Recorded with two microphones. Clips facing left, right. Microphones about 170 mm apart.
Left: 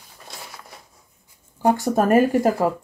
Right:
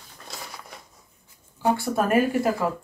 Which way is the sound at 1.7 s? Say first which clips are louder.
Left 5 dB; 40° left (ahead or behind).